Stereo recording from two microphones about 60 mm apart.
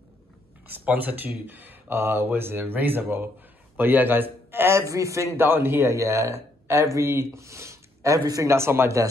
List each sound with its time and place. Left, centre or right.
0.7 s a man's voice: right
5.4 s speech: right
5.9 s speech: right
8.5 s a man's voice: right